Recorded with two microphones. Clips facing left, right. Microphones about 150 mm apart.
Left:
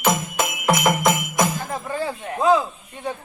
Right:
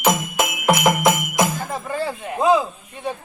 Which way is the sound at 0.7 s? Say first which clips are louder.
Right 2 dB; 10° right (ahead or behind).